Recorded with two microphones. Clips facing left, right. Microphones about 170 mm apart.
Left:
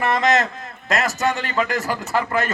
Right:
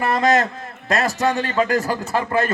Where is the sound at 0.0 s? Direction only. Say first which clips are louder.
Right 1 dB; 30° right (ahead or behind).